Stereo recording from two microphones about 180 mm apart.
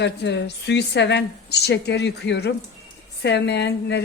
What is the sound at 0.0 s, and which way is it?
A woman's voice, 75° left (ahead or behind).